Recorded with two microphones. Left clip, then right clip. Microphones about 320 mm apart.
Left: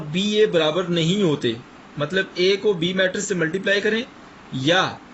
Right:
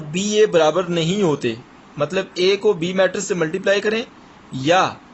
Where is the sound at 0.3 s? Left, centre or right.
Centre.